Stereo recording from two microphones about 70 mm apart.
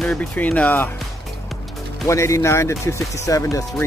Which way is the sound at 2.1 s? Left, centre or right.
Left.